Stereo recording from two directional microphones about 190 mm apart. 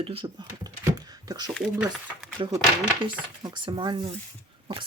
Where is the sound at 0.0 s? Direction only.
30° right (ahead or behind).